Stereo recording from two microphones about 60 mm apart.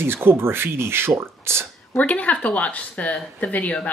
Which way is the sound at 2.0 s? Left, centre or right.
Left.